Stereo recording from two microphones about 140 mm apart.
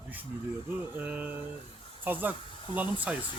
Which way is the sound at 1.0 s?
10° right (ahead or behind).